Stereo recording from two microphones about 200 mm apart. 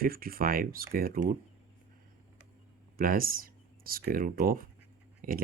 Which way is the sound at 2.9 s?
45° right (ahead or behind).